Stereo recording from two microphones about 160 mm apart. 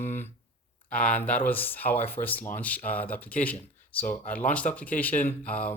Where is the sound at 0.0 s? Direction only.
15° left (ahead or behind).